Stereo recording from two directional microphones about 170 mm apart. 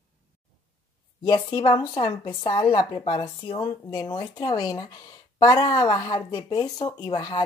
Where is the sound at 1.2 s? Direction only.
25° left (ahead or behind).